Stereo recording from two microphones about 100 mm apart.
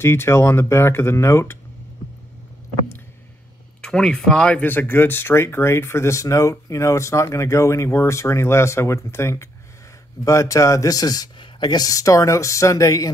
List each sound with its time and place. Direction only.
0.0 s speech: 25° left (ahead or behind)
3.8 s speech: 10° left (ahead or behind); by 13.1 s 35° left (ahead or behind)